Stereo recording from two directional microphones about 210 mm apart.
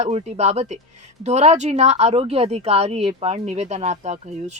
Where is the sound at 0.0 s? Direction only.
30° right (ahead or behind).